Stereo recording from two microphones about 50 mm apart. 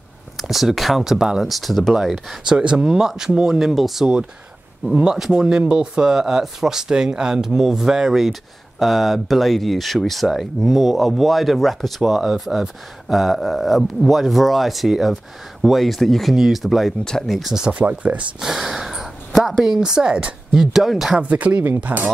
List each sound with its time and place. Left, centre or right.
0.4 s speech: centre
2.4 s speech: centre
12.0 s speech: centre
17.8 s speech: right
18.4 s speech: centre
21.1 s speech: right